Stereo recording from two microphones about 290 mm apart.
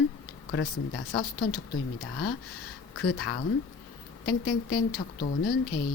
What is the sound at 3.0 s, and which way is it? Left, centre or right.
Speech, left.